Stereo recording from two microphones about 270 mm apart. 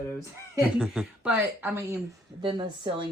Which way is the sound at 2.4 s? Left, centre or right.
Centre.